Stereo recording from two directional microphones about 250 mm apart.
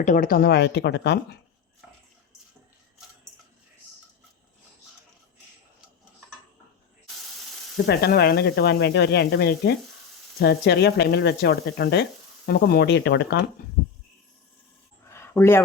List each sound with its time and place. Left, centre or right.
0.0 s speech: left
7.9 s speech: left
15.1 s a sound: centre